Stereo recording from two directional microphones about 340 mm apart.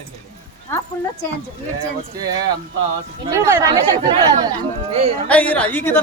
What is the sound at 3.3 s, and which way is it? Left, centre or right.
Speech, centre.